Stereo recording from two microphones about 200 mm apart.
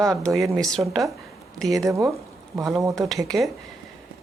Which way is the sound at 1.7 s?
15° right (ahead or behind).